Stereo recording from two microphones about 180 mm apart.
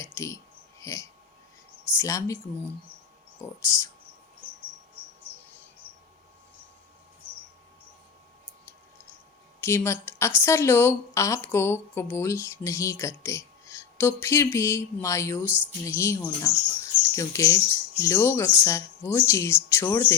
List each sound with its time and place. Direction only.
0.0 s speech: 15° left (ahead or behind)
3.4 s speech: 15° left (ahead or behind)
9.6 s speech: 15° left (ahead or behind)